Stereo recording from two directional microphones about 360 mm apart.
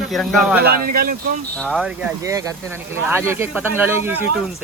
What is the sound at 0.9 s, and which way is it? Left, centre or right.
Speech, right.